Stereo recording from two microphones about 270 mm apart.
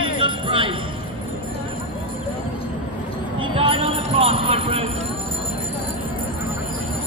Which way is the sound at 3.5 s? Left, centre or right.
Centre.